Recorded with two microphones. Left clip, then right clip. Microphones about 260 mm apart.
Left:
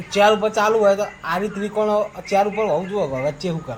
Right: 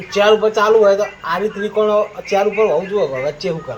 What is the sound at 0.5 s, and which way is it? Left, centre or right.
Speech, left.